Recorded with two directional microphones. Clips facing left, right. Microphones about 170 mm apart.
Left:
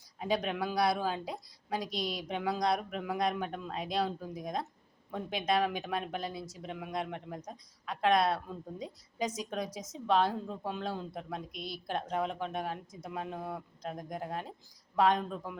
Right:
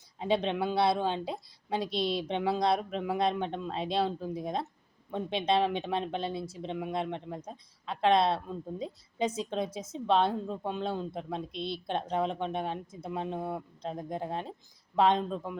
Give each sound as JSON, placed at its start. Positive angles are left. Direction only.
{"t": 0.2, "sound": "a woman's voice", "side_deg": -25}